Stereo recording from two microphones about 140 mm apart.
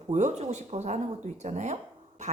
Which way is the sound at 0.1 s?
60° right (ahead or behind).